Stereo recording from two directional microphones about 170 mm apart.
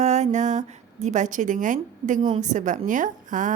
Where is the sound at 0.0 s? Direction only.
40° right (ahead or behind).